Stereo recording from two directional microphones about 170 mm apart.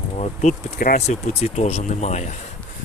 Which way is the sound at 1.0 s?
40° left (ahead or behind).